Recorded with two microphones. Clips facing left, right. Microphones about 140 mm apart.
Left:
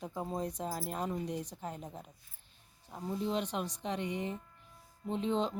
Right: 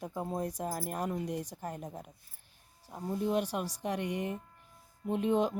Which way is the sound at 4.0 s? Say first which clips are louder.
Right 1 dB; 65° right (ahead or behind).